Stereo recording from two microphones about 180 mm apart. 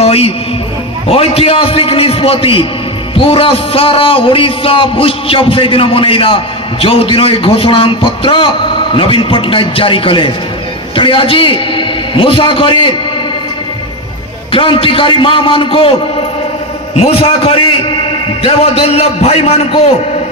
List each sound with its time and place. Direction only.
0.0 s music: 35° left (ahead or behind)
1.0 s a man's voice: 30° left (ahead or behind)
14.5 s a man's voice: 30° left (ahead or behind)